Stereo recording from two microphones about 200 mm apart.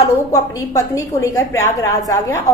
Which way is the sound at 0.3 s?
15° left (ahead or behind).